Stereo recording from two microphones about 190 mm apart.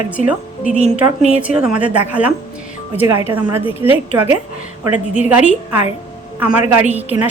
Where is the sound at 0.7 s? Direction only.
35° right (ahead or behind).